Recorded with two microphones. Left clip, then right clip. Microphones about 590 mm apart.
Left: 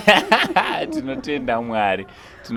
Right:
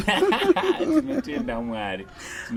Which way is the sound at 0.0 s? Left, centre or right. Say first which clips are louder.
Left 6 dB; left.